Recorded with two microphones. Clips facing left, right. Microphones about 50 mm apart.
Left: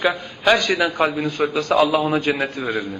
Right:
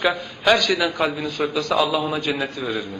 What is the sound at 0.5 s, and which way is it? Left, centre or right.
A man's voice, left.